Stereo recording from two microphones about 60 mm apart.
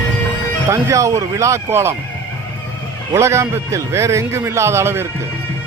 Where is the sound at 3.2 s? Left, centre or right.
Right.